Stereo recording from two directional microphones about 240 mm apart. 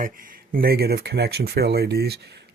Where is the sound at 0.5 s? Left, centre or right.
Right.